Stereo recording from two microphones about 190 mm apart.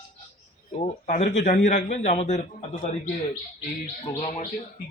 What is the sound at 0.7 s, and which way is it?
A man's voice, 35° left (ahead or behind).